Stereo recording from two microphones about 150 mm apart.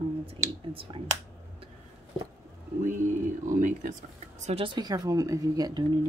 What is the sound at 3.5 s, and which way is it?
Speech, 60° right (ahead or behind).